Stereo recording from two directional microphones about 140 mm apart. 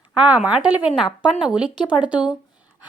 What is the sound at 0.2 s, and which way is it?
A woman's voice, 10° right (ahead or behind).